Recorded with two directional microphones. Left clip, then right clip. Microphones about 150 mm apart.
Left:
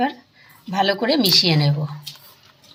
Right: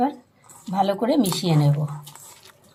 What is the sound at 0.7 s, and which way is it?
Speech, 5° right (ahead or behind).